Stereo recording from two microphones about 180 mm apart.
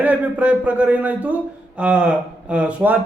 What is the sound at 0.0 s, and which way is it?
Speech, 10° right (ahead or behind).